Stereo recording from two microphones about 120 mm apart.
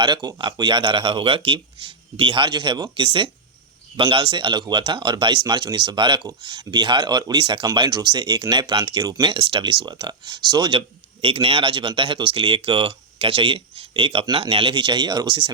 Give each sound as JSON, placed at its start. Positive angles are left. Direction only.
{"t": 0.0, "sound": "speech", "side_deg": -35}
{"t": 9.3, "sound": "speech", "side_deg": -45}
{"t": 10.8, "sound": "speech", "side_deg": -55}